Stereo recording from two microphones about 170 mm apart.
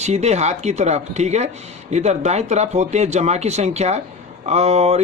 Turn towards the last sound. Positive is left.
turn(degrees=-40)  # may be behind; listen again after turning